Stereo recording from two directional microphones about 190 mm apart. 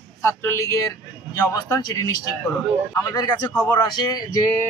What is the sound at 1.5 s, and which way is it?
Speech, 20° left (ahead or behind).